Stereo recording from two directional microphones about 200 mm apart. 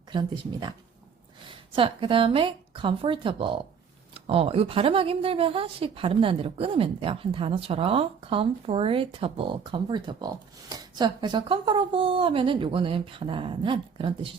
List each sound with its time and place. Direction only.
0.1 s a woman's voice: 25° right (ahead or behind)
1.7 s a woman's voice: 25° right (ahead or behind)